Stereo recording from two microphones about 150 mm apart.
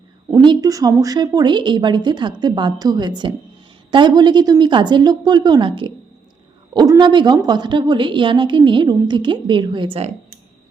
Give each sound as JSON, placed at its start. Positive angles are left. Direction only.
{"t": 0.3, "sound": "a woman's voice", "side_deg": -30}